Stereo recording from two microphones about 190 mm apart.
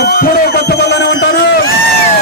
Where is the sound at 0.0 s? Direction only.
55° left (ahead or behind).